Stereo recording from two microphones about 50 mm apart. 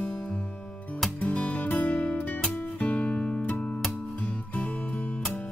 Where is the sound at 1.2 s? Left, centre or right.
Left.